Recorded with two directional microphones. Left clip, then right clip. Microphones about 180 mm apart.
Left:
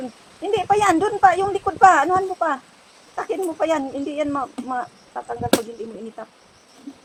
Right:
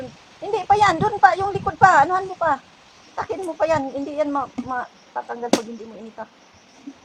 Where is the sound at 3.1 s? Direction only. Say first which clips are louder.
Left 1 dB; 55° left (ahead or behind).